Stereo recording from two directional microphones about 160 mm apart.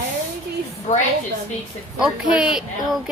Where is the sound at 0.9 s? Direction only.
45° left (ahead or behind).